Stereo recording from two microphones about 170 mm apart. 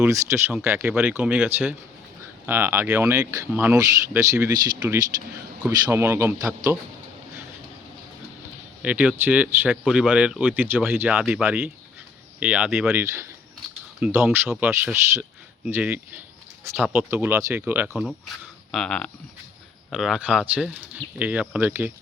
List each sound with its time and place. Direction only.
0.1 s speech: 15° right (ahead or behind)
8.8 s speech: 5° right (ahead or behind)